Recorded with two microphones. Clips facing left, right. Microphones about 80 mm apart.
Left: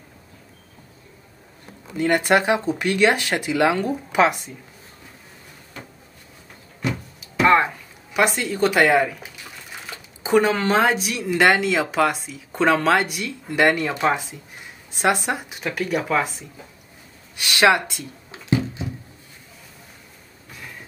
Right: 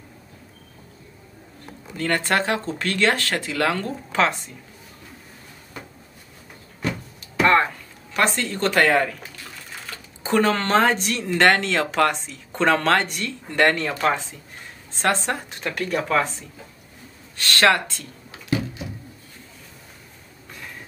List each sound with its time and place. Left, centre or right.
2.0 s speech: centre
6.8 s speech: centre
18.3 s a sound: left